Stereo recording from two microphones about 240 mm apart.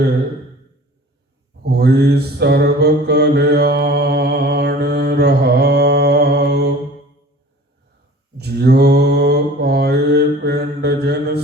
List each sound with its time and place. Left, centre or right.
1.6 s mantra: right
8.4 s mantra: right